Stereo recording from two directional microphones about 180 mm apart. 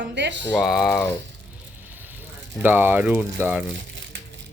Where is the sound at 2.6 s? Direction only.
10° right (ahead or behind).